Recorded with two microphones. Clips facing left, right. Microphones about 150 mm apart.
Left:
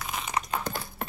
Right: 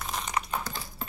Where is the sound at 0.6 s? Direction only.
55° left (ahead or behind).